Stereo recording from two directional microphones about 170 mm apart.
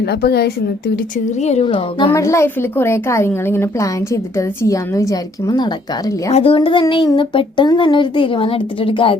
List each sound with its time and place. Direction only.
0.0 s speech: 70° left (ahead or behind)
1.2 s child singing: 40° left (ahead or behind)
2.1 s a woman's voice: 15° left (ahead or behind)
6.3 s child singing: 35° left (ahead or behind)